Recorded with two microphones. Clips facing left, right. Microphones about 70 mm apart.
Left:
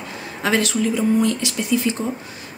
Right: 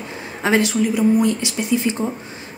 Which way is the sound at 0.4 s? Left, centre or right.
Right.